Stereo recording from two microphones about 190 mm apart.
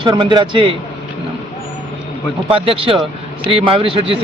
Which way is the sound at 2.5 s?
30° right (ahead or behind).